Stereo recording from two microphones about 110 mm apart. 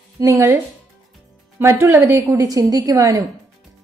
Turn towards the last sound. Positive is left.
turn(degrees=-30)  # may be behind; listen again after turning